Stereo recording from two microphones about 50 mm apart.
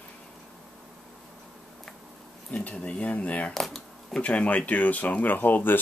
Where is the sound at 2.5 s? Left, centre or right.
Left.